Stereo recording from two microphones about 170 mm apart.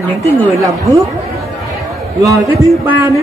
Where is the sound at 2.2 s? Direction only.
20° right (ahead or behind).